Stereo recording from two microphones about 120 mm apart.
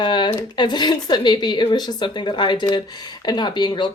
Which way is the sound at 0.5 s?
35° left (ahead or behind).